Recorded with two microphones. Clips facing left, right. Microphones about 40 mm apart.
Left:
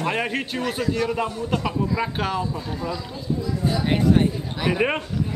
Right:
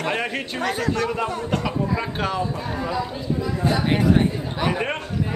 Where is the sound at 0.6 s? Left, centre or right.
Right.